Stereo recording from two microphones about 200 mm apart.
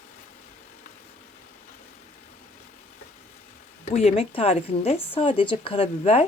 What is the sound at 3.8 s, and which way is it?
A woman's voice, 35° left (ahead or behind).